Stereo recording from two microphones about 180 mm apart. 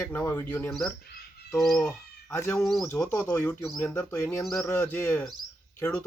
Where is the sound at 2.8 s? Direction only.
10° left (ahead or behind).